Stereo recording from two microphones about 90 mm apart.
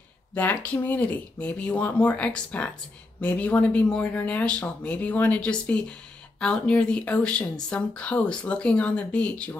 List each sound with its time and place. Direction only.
0.3 s speech: 20° left (ahead or behind)